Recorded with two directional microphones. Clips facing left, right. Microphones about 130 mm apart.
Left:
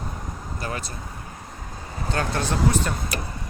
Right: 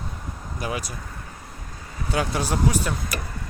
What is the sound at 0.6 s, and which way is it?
Speech, 10° right (ahead or behind).